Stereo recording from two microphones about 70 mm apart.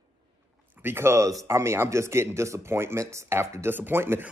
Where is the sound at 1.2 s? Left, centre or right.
Right.